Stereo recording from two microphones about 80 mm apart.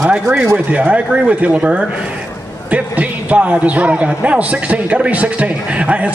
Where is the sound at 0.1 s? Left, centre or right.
Centre.